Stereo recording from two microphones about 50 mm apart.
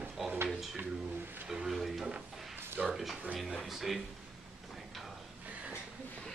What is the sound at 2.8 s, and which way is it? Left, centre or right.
Speech, centre.